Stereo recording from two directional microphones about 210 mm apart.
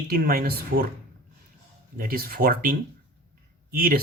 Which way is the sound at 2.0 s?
45° right (ahead or behind).